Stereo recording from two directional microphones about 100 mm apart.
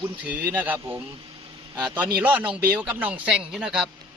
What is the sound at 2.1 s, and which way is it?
Speech, 15° right (ahead or behind).